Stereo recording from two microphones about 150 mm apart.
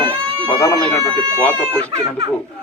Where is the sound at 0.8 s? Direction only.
15° left (ahead or behind).